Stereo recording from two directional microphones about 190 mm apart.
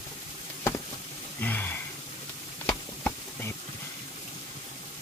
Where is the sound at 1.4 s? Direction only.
10° left (ahead or behind).